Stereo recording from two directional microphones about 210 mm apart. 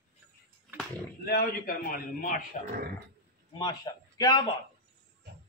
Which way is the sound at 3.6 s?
20° left (ahead or behind).